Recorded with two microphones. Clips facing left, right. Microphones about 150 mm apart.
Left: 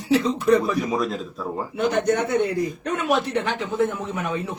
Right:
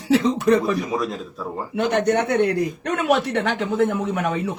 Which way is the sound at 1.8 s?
65° right (ahead or behind).